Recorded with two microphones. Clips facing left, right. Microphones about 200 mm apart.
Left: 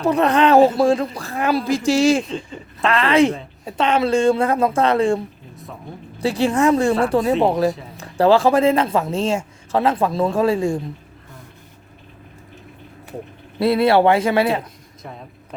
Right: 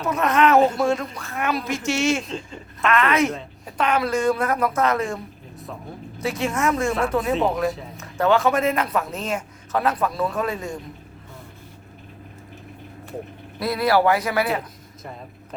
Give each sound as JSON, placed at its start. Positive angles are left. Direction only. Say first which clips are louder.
{"t": 0.0, "sound": "speech", "louder": "left 4 dB", "side_deg": 30}
{"t": 2.2, "sound": "speech", "louder": "left 3 dB", "side_deg": 0}
{"t": 2.8, "sound": "a man's voice", "louder": "left 4 dB", "side_deg": 30}
{"t": 7.7, "sound": "speech", "louder": "left 3 dB", "side_deg": 0}
{"t": 7.9, "sound": "a man's voice", "louder": "left 5 dB", "side_deg": 30}
{"t": 13.6, "sound": "a man's voice", "louder": "left 5 dB", "side_deg": 25}